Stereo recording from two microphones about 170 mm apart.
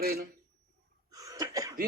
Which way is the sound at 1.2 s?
20° right (ahead or behind).